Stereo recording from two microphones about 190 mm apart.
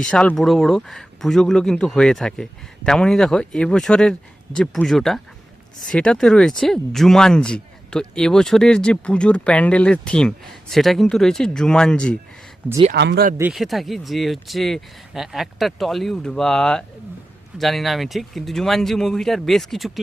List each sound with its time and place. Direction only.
0.0 s speech: 5° left (ahead or behind)
12.9 s speech: 60° right (ahead or behind)
13.5 s speech: centre (ahead or behind)